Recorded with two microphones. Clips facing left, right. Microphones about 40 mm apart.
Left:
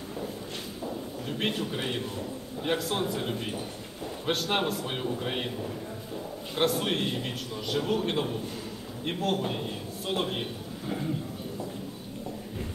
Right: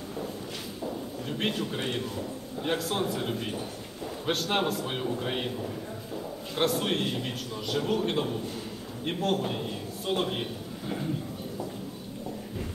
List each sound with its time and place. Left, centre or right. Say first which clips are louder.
1.4 s a man's voice: even; centre